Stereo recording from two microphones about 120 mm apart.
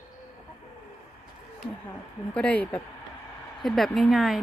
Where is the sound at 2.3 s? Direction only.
10° left (ahead or behind).